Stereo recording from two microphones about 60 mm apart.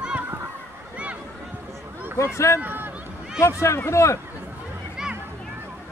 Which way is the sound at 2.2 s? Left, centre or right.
Left.